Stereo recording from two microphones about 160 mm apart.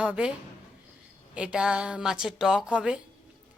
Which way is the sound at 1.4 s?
5° right (ahead or behind).